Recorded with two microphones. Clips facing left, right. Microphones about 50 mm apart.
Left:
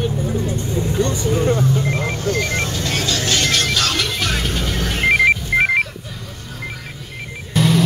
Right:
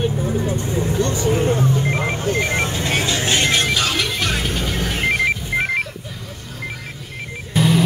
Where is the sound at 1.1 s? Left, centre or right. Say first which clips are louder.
Even; right; by 5.2 s centre.